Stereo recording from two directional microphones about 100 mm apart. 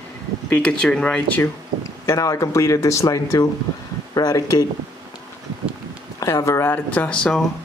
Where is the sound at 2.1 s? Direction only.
30° left (ahead or behind).